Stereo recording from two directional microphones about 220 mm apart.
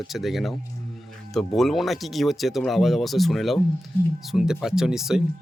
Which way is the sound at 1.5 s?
Centre (ahead or behind).